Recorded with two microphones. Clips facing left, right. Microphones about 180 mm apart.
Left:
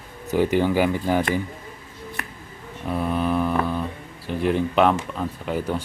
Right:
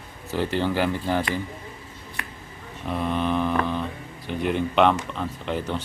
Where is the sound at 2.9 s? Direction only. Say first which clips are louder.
Left 2 dB; 5° left (ahead or behind).